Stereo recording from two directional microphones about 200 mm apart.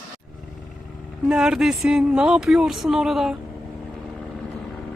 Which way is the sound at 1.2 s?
5° right (ahead or behind).